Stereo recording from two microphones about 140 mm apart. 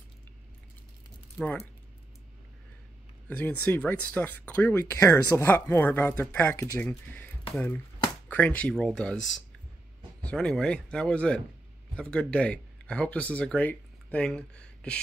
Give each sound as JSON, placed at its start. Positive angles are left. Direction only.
{"t": 3.3, "sound": "speech", "side_deg": 10}